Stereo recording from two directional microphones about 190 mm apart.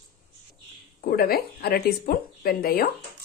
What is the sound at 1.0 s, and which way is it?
Speech, 50° left (ahead or behind).